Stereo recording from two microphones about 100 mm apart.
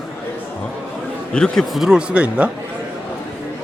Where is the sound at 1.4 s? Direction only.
5° left (ahead or behind); by 2.5 s 10° right (ahead or behind).